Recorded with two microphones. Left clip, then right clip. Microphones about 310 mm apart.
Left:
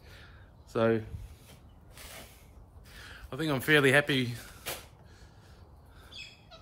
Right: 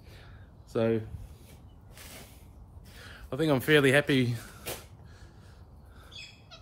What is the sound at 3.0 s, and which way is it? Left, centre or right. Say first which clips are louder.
Speech: right 5 dB; centre.